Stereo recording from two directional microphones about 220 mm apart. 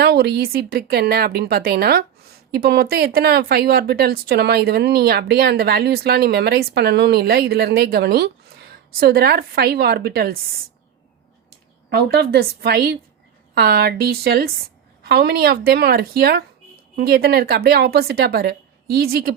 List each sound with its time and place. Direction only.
0.0 s speech: 45° right (ahead or behind)
11.9 s speech: 50° right (ahead or behind)